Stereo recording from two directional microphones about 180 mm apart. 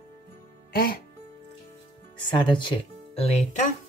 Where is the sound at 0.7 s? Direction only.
55° left (ahead or behind).